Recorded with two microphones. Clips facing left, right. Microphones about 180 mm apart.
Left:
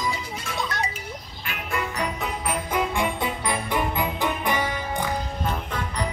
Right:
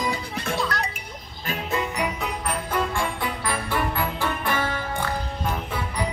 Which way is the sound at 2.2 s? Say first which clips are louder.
Even; 10° left (ahead or behind).